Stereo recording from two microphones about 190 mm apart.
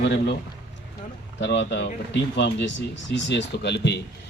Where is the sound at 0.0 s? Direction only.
65° left (ahead or behind).